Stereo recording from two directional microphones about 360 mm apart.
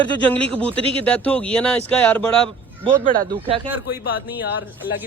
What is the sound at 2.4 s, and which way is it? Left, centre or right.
Speech, centre.